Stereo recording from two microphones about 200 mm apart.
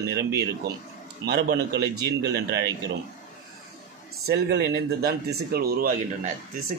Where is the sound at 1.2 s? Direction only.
55° right (ahead or behind).